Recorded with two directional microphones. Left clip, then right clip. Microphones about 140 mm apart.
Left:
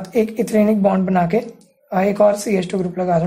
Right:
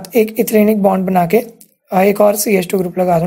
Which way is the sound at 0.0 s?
25° right (ahead or behind).